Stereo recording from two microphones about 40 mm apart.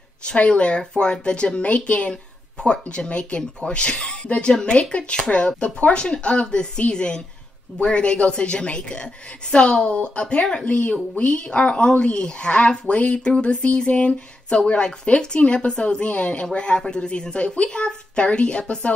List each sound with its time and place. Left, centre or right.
0.2 s speech: left